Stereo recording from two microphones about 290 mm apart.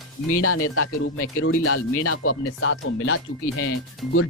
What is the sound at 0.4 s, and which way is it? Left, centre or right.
Speech, left.